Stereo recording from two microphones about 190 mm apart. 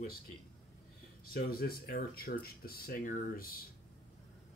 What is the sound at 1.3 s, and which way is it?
Speech, 50° left (ahead or behind).